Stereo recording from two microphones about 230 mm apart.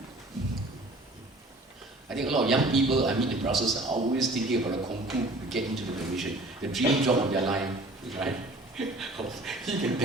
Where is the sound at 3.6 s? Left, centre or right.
Right.